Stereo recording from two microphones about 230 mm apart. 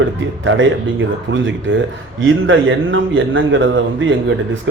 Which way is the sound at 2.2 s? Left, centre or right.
Right.